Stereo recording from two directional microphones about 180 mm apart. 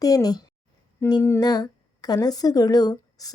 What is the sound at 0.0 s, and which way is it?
A woman's voice, 20° left (ahead or behind).